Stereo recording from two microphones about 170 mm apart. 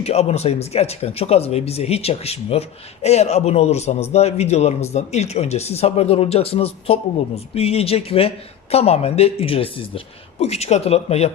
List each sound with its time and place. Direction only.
0.0 s speech: 35° left (ahead or behind)